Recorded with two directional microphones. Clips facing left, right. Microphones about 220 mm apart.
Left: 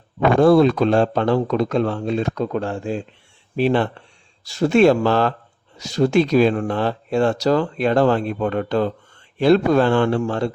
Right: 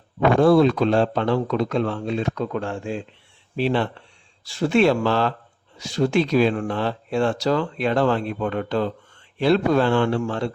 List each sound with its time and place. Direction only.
0.3 s speech: 45° left (ahead or behind)
3.5 s speech: 50° left (ahead or behind)